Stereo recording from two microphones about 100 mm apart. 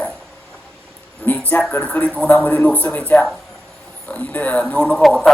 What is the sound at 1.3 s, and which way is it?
Speech, 15° left (ahead or behind).